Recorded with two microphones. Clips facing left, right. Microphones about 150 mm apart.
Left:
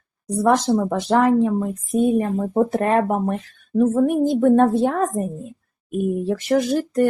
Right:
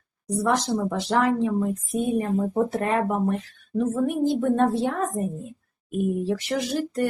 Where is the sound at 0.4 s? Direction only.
50° left (ahead or behind).